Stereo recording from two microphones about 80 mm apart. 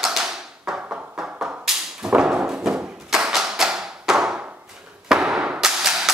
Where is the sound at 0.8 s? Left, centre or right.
Centre.